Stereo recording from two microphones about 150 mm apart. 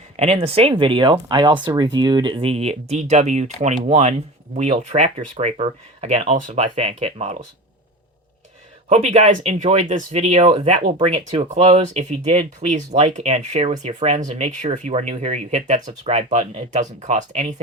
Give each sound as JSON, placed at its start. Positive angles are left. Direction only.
{"t": 0.2, "sound": "speech", "side_deg": -45}
{"t": 8.9, "sound": "speech", "side_deg": -50}